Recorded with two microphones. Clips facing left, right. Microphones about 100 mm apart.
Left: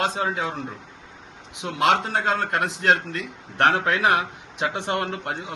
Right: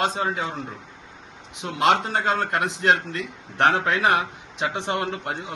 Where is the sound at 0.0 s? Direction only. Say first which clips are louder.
Even; centre (ahead or behind).